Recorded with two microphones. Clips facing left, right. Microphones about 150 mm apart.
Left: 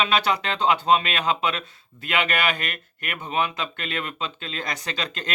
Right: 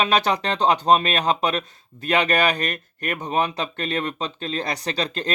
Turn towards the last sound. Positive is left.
turn(degrees=-30)  # may be behind; listen again after turning